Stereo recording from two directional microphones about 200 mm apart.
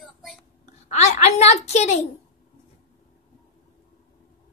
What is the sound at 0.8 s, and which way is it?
A woman's voice, 35° left (ahead or behind).